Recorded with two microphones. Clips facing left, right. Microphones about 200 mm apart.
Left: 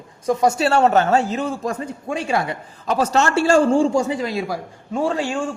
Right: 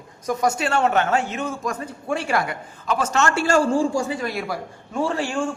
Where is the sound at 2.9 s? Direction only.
35° left (ahead or behind).